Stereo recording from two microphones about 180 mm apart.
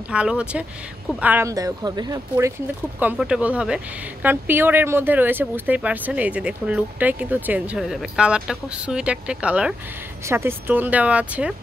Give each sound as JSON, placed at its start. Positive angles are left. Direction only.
{"t": 0.1, "sound": "speech", "side_deg": -5}
{"t": 3.0, "sound": "speech", "side_deg": -5}